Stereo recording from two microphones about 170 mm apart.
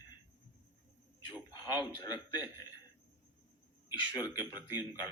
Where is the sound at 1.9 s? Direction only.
25° left (ahead or behind).